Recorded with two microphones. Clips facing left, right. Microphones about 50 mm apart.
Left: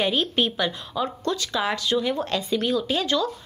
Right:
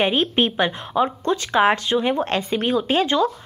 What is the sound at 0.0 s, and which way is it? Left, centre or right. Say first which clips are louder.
Speech: right 4 dB; right.